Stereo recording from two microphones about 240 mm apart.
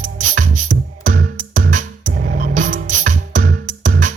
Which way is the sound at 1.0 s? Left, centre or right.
Right.